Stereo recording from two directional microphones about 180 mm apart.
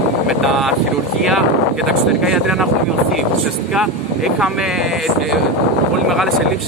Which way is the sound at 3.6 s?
Centre (ahead or behind).